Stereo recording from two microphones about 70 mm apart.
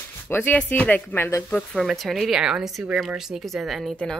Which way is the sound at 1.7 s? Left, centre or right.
Centre.